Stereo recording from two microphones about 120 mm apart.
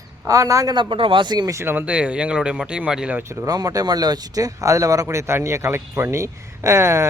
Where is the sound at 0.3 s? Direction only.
25° right (ahead or behind).